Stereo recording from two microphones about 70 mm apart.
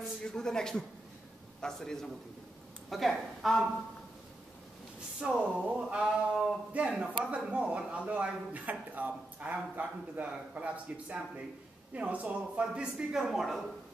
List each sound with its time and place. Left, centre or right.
0.2 s a man's voice: centre
5.2 s speech: centre